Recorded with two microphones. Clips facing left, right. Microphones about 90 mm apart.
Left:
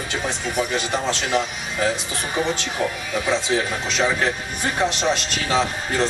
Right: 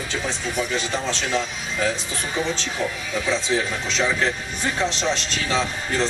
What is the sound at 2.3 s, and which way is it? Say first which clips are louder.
Speech: left 2 dB; 15° left (ahead or behind).